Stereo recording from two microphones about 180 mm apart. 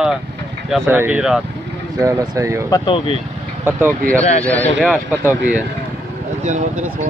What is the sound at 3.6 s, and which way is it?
Speech, 15° right (ahead or behind).